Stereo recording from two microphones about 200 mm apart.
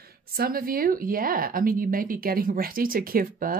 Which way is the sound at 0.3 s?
50° right (ahead or behind).